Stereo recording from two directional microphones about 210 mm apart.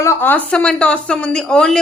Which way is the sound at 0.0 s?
10° left (ahead or behind).